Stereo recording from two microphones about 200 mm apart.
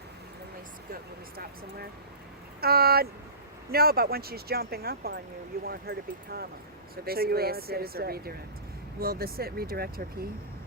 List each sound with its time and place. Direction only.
2.6 s speech: 50° right (ahead or behind)